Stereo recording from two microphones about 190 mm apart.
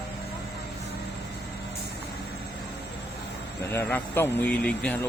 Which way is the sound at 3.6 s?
15° left (ahead or behind).